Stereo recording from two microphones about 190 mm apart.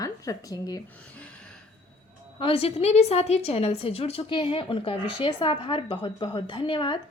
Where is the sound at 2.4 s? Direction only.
30° left (ahead or behind).